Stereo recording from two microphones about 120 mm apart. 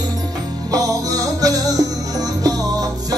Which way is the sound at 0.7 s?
30° right (ahead or behind).